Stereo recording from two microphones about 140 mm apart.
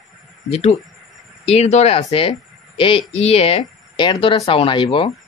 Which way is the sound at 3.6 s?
30° left (ahead or behind).